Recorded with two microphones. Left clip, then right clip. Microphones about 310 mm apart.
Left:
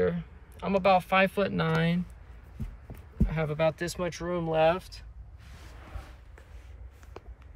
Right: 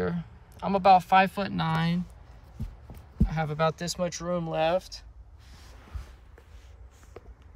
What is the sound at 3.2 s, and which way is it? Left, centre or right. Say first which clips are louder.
Speech: even; centre.